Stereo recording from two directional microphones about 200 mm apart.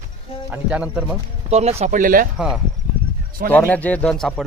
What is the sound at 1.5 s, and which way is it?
Speech, 30° right (ahead or behind).